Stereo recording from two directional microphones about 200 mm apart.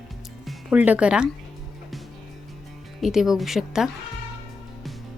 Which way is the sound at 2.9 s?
Centre (ahead or behind).